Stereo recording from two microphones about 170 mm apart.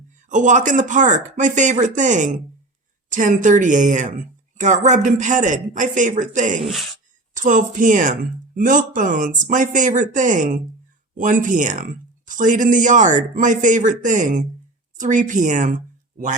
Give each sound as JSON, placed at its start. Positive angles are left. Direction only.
{"t": 0.3, "sound": "speech", "side_deg": -45}